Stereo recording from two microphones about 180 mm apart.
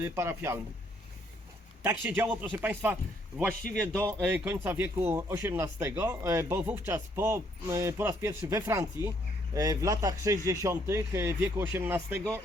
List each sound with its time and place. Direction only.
0.0 s speech: 15° right (ahead or behind)
1.8 s speech: 15° right (ahead or behind)